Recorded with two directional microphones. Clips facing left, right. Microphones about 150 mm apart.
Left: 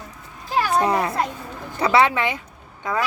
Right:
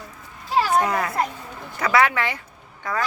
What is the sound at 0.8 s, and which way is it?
Children playing, 30° left (ahead or behind).